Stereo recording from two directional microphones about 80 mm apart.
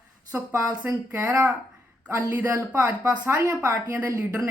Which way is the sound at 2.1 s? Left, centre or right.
Right.